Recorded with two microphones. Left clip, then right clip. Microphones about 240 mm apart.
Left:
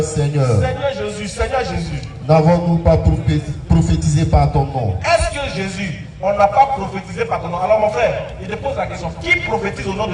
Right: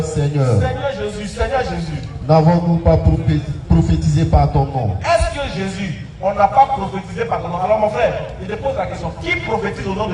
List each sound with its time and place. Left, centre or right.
0.0 s a man's voice: left